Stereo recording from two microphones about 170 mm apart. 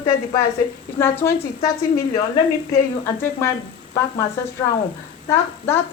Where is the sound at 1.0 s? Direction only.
15° left (ahead or behind).